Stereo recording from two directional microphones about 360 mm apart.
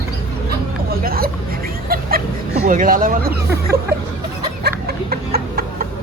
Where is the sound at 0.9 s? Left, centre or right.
Right.